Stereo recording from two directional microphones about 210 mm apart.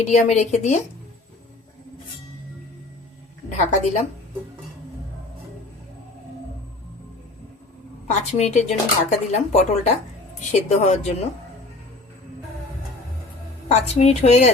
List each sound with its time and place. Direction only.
0.1 s speech: 35° left (ahead or behind)
3.5 s speech: 35° left (ahead or behind)
8.0 s speech: 35° left (ahead or behind)
13.7 s speech: 30° left (ahead or behind)